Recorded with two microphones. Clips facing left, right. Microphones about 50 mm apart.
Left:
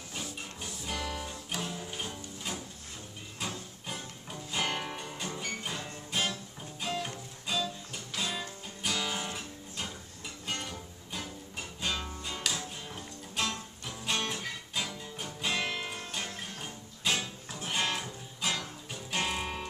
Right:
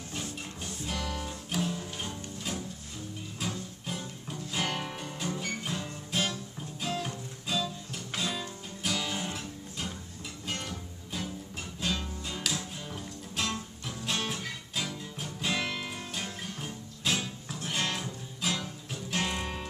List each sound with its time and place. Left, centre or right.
0.1 s music: centre